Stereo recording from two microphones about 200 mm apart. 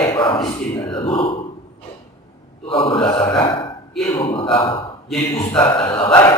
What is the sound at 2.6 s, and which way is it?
A man's voice, 25° left (ahead or behind).